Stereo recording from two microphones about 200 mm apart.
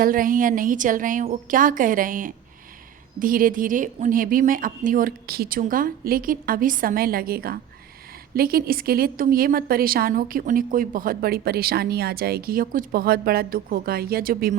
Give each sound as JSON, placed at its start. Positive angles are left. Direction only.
{"t": 0.0, "sound": "a woman's voice", "side_deg": -45}